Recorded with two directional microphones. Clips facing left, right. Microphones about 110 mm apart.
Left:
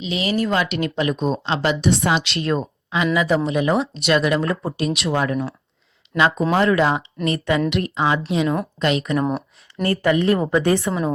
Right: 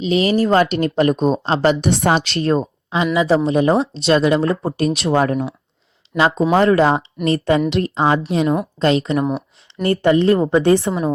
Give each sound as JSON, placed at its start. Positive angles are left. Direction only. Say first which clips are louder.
{"t": 0.0, "sound": "speech", "louder": "right 6 dB", "side_deg": -40}
{"t": 9.1, "sound": "a sound", "louder": "right 2 dB", "side_deg": 0}
{"t": 9.8, "sound": "a woman's voice", "louder": "right 4 dB", "side_deg": -30}